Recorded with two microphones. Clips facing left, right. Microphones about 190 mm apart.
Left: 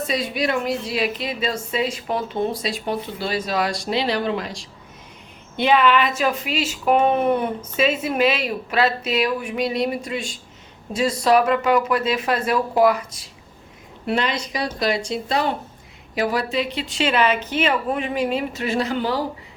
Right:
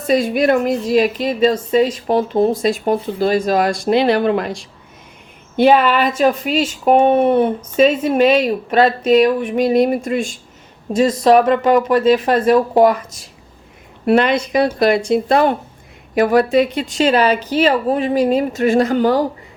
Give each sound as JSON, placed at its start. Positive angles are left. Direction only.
{"t": 0.1, "sound": "speech", "side_deg": -50}
{"t": 2.6, "sound": "speech", "side_deg": -50}
{"t": 5.5, "sound": "speech", "side_deg": -45}
{"t": 6.8, "sound": "speech", "side_deg": -30}
{"t": 7.9, "sound": "speech", "side_deg": -40}
{"t": 14.0, "sound": "speech", "side_deg": -55}